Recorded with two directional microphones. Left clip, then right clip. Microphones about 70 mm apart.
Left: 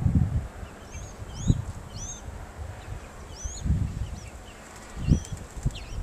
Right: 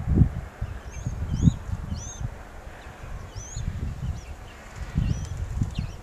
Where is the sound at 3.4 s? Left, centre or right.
Centre.